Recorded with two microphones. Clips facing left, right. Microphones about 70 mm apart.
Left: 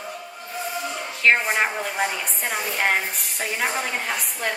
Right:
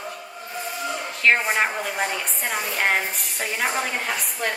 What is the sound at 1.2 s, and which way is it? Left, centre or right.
A woman's voice, centre.